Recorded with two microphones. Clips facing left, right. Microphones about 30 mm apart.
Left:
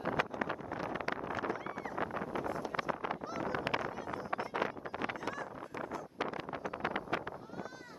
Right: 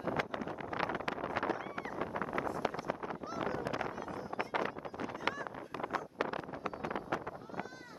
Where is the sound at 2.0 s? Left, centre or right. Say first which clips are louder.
Left 3 dB; left.